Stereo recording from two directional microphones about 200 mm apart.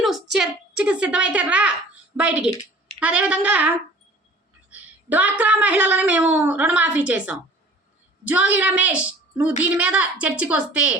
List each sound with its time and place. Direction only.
0.0 s a woman's voice: centre (ahead or behind)